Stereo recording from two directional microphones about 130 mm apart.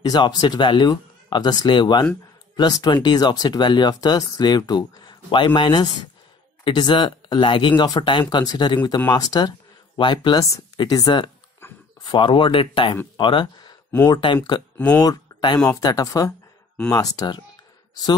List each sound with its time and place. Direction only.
0.0 s speech: 30° left (ahead or behind)
11.6 s a sound: 20° left (ahead or behind)
12.0 s speech: 40° left (ahead or behind)